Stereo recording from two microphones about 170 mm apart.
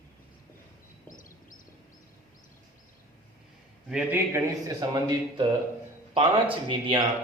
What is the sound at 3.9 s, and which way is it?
A man's voice, 10° right (ahead or behind).